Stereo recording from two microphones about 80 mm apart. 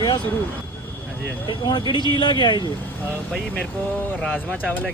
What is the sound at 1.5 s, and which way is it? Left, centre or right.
Speech, left.